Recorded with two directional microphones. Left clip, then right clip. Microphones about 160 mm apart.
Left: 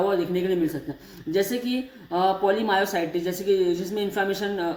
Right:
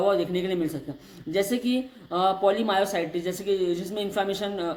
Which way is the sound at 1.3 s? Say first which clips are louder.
Left 1 dB; 50° right (ahead or behind).